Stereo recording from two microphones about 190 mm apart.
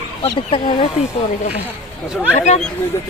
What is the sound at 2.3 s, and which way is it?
Speech, 35° left (ahead or behind).